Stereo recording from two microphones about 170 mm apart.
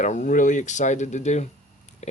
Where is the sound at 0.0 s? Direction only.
45° left (ahead or behind).